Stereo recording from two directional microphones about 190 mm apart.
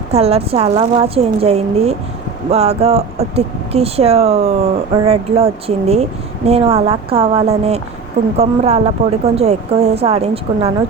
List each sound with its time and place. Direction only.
0.1 s speech: 30° right (ahead or behind)